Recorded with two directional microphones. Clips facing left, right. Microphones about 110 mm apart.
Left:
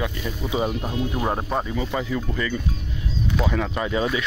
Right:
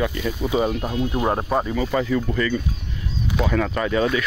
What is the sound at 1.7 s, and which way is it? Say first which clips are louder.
Speech: right 4 dB; 5° left (ahead or behind).